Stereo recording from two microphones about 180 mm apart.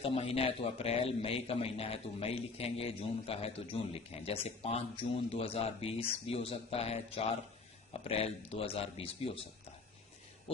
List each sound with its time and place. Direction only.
0.0 s a man's voice: 35° left (ahead or behind)